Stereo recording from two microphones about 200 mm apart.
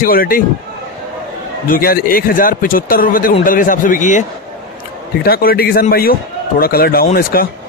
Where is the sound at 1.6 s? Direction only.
45° left (ahead or behind).